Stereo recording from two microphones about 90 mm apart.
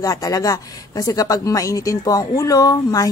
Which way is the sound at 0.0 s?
45° left (ahead or behind).